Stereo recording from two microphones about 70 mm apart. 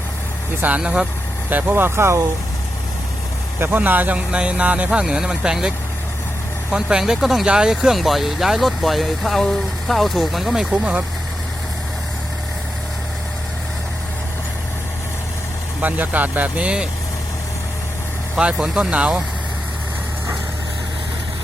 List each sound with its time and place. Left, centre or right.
0.8 s speech: centre
1.5 s speech: right
3.6 s speech: right; by 11.0 s centre
15.8 s speech: right
18.5 s speech: centre
18.9 s speech: centre